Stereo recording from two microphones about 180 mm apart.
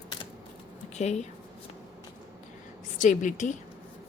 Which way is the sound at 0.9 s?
40° left (ahead or behind).